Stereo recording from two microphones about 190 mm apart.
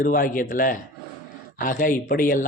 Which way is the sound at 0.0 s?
45° left (ahead or behind).